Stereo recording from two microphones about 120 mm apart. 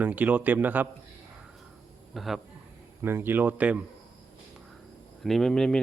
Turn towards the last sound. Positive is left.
turn(degrees=5)  # may be behind; listen again after turning